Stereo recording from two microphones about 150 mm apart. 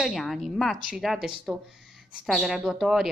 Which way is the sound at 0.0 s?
Centre (ahead or behind).